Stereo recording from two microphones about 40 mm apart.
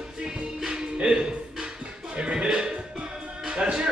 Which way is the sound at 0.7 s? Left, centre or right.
Right.